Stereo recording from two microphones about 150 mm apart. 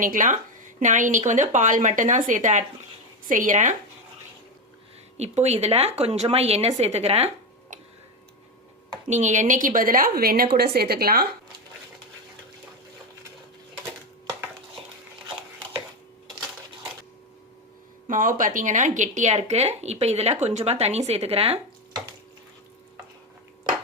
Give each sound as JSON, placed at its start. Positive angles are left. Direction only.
{"t": 0.0, "sound": "a woman's voice", "side_deg": -60}
{"t": 5.1, "sound": "speech", "side_deg": -45}
{"t": 9.0, "sound": "a woman's voice", "side_deg": -50}
{"t": 18.1, "sound": "speech", "side_deg": -60}